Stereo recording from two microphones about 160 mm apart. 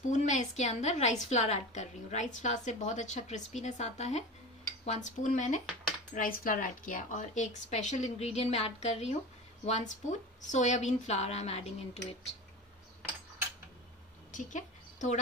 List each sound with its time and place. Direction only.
0.1 s a woman's voice: 50° left (ahead or behind)
6.1 s a woman's voice: 65° left (ahead or behind); by 12.4 s 40° left (ahead or behind)
14.3 s a sound: 50° left (ahead or behind)